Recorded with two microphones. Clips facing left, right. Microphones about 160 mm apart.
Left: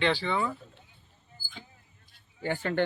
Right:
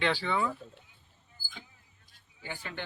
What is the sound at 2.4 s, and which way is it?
Speech, 50° left (ahead or behind).